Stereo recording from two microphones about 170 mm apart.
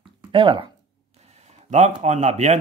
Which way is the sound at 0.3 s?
30° right (ahead or behind).